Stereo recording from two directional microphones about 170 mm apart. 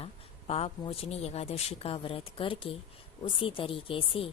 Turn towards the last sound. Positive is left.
turn(degrees=30)  # may be behind; listen again after turning